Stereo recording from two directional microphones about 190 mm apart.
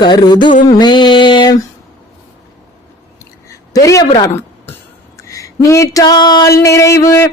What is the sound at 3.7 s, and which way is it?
Speech, 20° left (ahead or behind).